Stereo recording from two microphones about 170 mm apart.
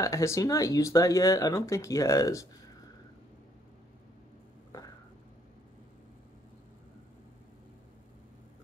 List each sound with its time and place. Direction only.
0.0 s speech: 15° left (ahead or behind)